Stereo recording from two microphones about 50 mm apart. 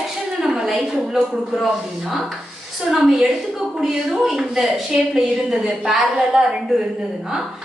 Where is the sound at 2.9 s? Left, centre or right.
Centre.